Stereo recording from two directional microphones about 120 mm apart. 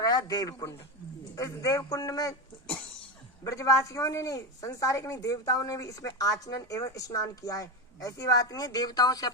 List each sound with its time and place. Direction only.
0.0 s a man's voice: 30° left (ahead or behind)
3.5 s speech: 25° left (ahead or behind)